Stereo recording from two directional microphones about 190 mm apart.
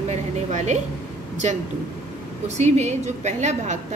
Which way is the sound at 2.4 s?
35° right (ahead or behind).